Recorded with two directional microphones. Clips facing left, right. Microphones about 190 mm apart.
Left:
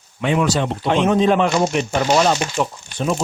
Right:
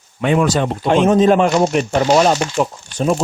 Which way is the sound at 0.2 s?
50° right (ahead or behind).